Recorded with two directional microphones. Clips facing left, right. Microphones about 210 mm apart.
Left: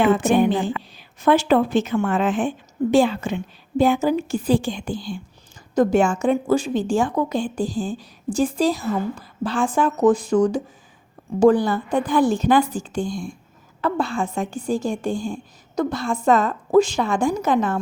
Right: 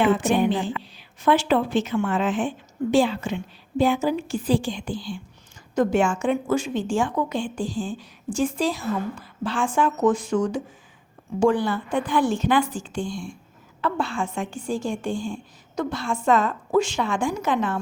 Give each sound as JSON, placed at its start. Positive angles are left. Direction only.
{"t": 0.0, "sound": "a woman's voice", "side_deg": 45}